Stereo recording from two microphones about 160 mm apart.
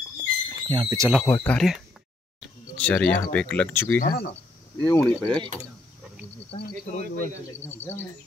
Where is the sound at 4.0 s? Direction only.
80° left.